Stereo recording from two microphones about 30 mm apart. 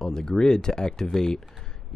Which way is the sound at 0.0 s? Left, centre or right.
Left.